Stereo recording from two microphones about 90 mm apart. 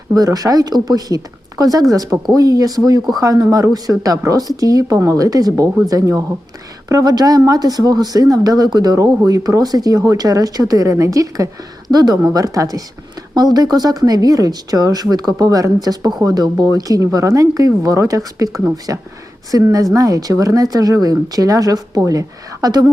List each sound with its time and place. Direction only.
0.1 s a woman's voice: 40° right (ahead or behind)